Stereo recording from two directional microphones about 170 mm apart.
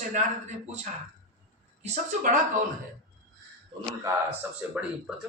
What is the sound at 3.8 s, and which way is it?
A man's voice, 15° right (ahead or behind).